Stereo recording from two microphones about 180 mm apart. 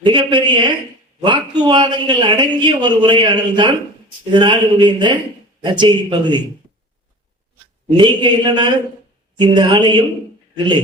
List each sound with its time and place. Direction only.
0.0 s a man's voice: 25° right (ahead or behind)
7.9 s a man's voice: 25° right (ahead or behind)